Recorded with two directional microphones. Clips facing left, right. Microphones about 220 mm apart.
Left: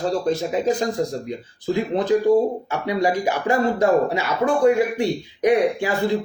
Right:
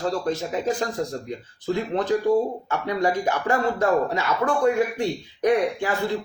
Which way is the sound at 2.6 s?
10° left (ahead or behind).